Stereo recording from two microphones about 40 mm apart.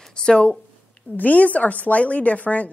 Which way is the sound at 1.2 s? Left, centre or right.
Left.